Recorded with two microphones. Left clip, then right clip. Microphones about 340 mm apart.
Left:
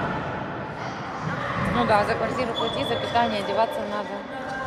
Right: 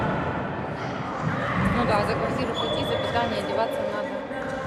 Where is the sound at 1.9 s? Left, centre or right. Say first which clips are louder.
Left 2 dB; left.